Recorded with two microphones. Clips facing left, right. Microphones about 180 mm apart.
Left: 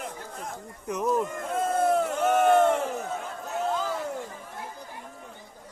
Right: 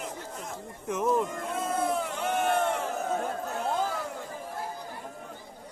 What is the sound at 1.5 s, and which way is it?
Crowd, 50° left (ahead or behind).